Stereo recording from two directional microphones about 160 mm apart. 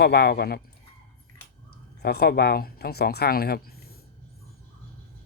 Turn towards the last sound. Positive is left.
turn(degrees=75)  # may be behind; listen again after turning